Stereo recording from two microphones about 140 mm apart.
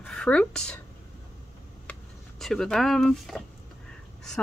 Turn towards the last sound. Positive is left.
turn(degrees=5)  # may be behind; listen again after turning